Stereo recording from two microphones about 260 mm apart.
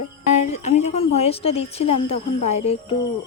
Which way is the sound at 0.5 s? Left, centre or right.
Left.